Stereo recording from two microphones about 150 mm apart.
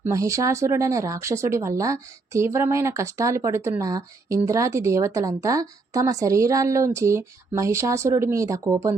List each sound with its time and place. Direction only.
0.0 s a woman's voice: 20° right (ahead or behind)